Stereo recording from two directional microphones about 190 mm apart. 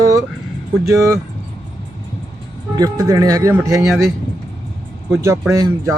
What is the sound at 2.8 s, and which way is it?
Speech, 20° right (ahead or behind).